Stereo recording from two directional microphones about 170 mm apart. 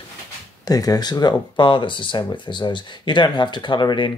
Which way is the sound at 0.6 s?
20° left (ahead or behind).